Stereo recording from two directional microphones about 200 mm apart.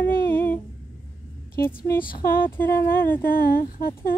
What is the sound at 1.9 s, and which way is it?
Speech, 45° left (ahead or behind).